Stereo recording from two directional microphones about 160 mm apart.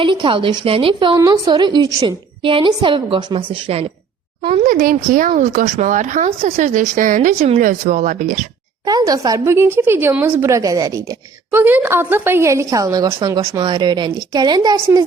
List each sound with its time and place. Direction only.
0.0 s a woman's voice: 30° right (ahead or behind)
4.6 s speech: 60° right (ahead or behind)
8.8 s a woman's voice: 25° right (ahead or behind)